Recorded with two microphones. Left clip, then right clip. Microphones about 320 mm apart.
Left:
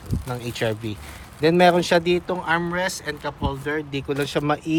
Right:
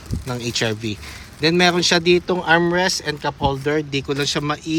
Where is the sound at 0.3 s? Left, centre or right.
Centre.